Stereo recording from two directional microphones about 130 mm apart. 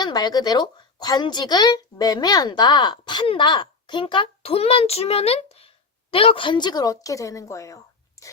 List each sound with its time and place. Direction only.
0.0 s a woman's voice: 30° left (ahead or behind)